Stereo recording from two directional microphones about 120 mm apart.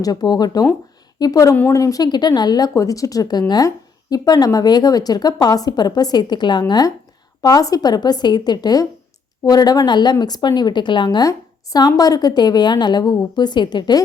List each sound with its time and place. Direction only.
0.0 s a woman's voice: 35° left (ahead or behind)
11.3 s a woman's voice: 30° left (ahead or behind)